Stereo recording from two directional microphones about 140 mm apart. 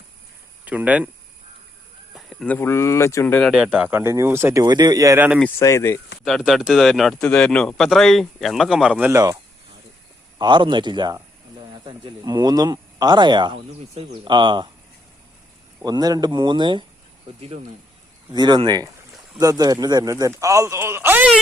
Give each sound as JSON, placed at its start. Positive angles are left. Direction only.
{"t": 0.6, "sound": "speech", "side_deg": -10}
{"t": 2.1, "sound": "a sound", "side_deg": 0}
{"t": 2.5, "sound": "speech", "side_deg": 15}
{"t": 3.4, "sound": "speech", "side_deg": -5}
{"t": 5.5, "sound": "speech", "side_deg": 20}
{"t": 6.2, "sound": "speech", "side_deg": 0}
{"t": 9.1, "sound": "speech", "side_deg": -25}
{"t": 15.8, "sound": "speech", "side_deg": -25}
{"t": 18.3, "sound": "speech", "side_deg": -30}